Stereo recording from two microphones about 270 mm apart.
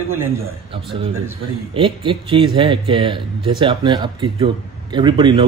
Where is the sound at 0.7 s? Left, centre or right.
Centre.